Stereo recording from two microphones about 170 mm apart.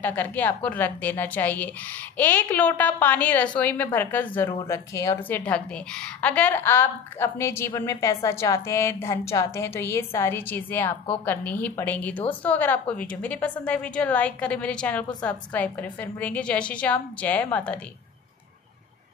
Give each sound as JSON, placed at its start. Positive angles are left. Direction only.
{"t": 0.0, "sound": "a woman's voice", "side_deg": 10}
{"t": 5.5, "sound": "a woman's voice", "side_deg": 5}